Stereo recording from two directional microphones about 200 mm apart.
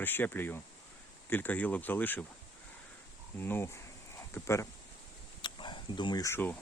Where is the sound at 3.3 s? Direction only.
10° left (ahead or behind).